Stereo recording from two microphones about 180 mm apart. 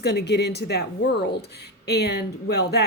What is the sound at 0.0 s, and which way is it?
A woman's voice, 65° left (ahead or behind).